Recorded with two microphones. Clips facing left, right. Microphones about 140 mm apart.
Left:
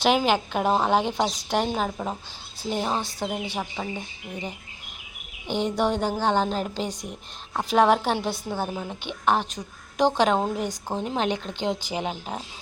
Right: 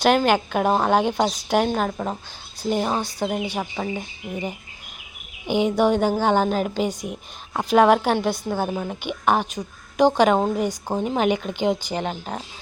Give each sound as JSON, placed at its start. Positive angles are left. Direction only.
{"t": 0.0, "sound": "a woman's voice", "side_deg": 0}
{"t": 5.5, "sound": "a woman's voice", "side_deg": -5}